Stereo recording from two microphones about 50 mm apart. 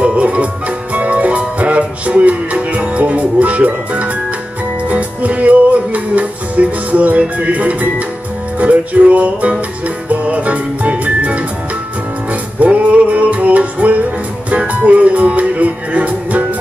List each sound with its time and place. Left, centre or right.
0.0 s music: right